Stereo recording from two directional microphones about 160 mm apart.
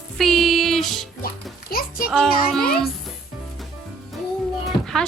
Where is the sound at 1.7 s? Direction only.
65° left (ahead or behind).